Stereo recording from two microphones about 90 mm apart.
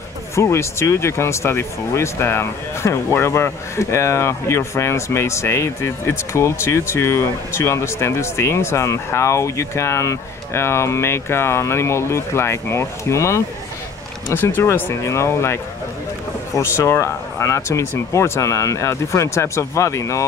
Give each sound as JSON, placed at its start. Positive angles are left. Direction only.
{"t": 0.4, "sound": "speech", "side_deg": 30}